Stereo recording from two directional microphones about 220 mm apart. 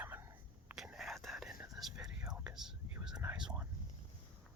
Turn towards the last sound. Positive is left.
turn(degrees=-5)  # may be behind; listen again after turning